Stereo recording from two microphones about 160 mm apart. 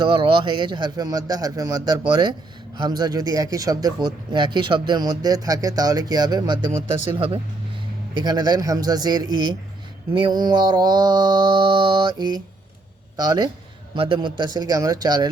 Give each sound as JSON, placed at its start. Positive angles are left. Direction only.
{"t": 0.0, "sound": "a man's voice", "side_deg": -30}